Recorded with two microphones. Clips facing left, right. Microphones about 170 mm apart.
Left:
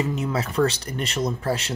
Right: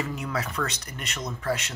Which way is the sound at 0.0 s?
20° left (ahead or behind).